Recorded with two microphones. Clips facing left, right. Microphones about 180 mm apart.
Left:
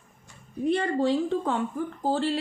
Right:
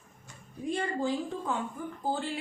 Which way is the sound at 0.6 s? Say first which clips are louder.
Left 7 dB; 70° left (ahead or behind).